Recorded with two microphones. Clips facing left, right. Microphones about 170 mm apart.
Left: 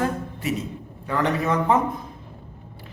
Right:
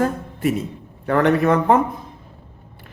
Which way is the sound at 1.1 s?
60° right (ahead or behind).